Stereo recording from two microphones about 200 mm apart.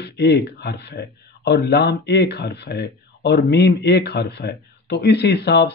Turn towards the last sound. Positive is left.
turn(degrees=55)  # may be behind; listen again after turning